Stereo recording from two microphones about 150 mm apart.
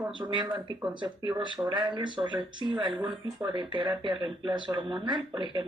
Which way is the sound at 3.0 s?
5° right (ahead or behind).